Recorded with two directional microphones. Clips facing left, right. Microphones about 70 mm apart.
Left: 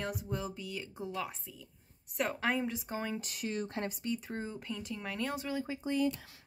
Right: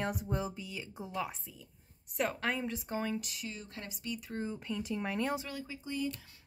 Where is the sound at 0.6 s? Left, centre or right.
Centre.